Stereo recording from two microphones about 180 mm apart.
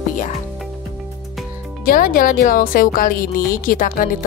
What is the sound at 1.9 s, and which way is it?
Speech, 50° left (ahead or behind).